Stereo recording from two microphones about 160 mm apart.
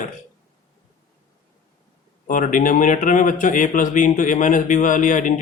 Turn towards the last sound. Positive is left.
turn(degrees=55)  # may be behind; listen again after turning